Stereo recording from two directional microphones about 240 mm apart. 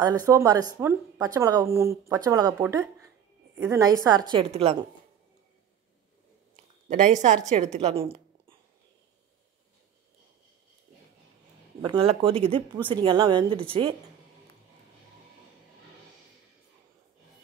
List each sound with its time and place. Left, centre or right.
0.3 s speech: centre
6.9 s a woman's voice: right
11.8 s speech: right